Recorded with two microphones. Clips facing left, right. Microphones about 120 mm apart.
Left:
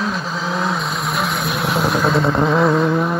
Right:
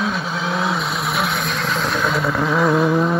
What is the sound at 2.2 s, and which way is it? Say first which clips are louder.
Vehicle: left 3 dB; 20° left (ahead or behind).